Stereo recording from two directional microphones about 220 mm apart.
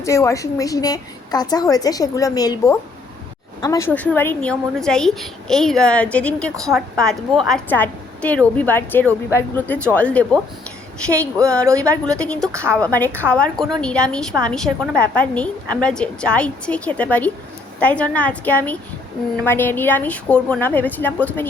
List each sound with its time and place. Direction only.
0.0 s a woman's voice: 15° left (ahead or behind)
11.3 s speech: 15° right (ahead or behind)
12.0 s a woman's voice: 5° left (ahead or behind)
12.5 s speech: 10° right (ahead or behind)
12.8 s a woman's voice: 5° left (ahead or behind)